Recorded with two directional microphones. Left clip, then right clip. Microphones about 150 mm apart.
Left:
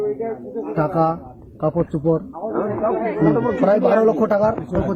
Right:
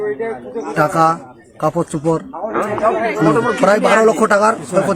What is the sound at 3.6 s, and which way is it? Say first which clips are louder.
Speech: right 4 dB; 25° right (ahead or behind).